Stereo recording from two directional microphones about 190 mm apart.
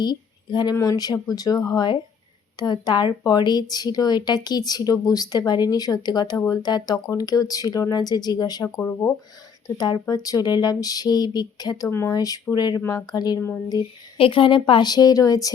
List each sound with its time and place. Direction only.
0.0 s speech: 20° left (ahead or behind)